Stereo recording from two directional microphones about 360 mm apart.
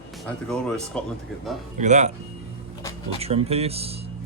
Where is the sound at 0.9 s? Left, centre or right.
Centre.